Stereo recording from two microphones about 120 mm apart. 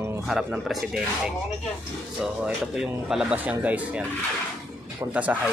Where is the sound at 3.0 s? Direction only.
10° right (ahead or behind).